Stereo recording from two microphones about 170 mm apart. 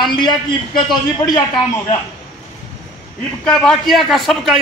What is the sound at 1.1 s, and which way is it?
Speech, 25° left (ahead or behind).